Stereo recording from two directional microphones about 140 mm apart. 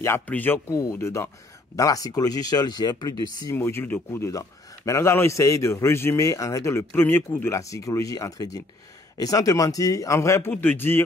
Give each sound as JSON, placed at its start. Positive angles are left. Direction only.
{"t": 0.0, "sound": "a man's voice", "side_deg": 15}